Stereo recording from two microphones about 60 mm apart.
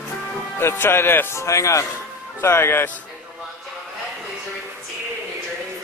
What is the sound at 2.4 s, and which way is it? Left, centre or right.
Speech, left.